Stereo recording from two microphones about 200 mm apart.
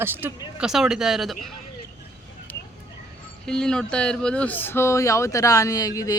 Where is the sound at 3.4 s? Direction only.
5° left (ahead or behind).